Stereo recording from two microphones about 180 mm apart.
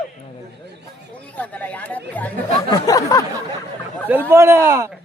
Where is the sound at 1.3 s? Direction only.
10° left (ahead or behind).